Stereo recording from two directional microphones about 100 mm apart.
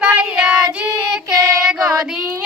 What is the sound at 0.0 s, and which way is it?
Child singing, 10° right (ahead or behind).